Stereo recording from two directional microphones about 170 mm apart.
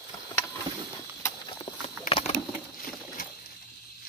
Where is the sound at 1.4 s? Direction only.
25° left (ahead or behind).